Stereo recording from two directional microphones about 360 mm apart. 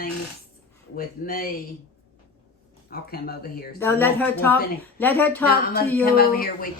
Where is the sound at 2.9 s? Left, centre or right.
Left.